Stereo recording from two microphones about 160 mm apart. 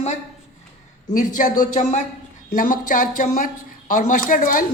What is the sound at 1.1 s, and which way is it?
A woman's voice, 55° left (ahead or behind).